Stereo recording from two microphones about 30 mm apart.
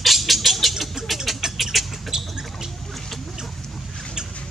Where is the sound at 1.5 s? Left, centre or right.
Centre.